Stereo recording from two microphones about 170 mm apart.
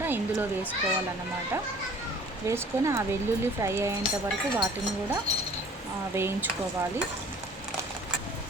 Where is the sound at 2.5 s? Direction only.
15° right (ahead or behind).